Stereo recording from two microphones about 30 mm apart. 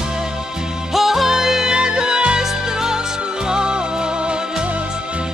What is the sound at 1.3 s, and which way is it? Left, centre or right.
Music, centre.